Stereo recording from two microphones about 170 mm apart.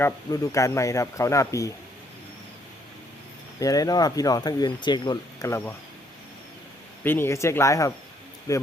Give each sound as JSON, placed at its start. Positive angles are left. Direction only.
{"t": 0.0, "sound": "speech", "side_deg": 20}
{"t": 3.6, "sound": "speech", "side_deg": 20}
{"t": 7.0, "sound": "speech", "side_deg": 15}